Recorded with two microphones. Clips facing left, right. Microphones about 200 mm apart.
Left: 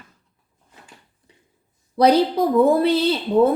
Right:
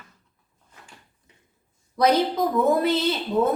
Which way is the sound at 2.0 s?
30° left (ahead or behind).